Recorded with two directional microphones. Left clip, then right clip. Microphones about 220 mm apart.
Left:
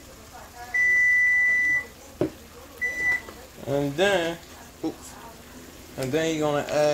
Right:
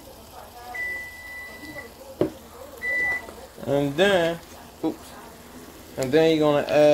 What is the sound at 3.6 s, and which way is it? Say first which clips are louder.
Speech: right 2 dB; 20° right (ahead or behind).